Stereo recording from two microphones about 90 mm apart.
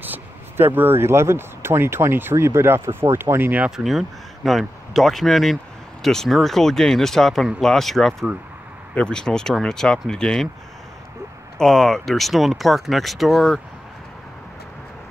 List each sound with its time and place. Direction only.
0.0 s speech: 20° right (ahead or behind)
3.6 s speech: 5° right (ahead or behind)
11.5 s speech: 5° left (ahead or behind)